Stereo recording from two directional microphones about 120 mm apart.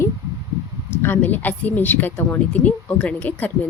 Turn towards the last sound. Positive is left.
turn(degrees=10)  # may be behind; listen again after turning